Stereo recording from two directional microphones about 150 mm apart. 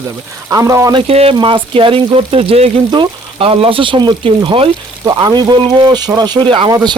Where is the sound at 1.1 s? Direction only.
40° right (ahead or behind).